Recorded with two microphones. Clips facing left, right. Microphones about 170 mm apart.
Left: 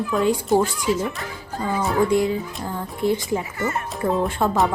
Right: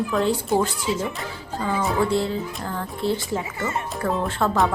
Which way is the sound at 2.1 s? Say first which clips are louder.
Left 3 dB; 15° left (ahead or behind).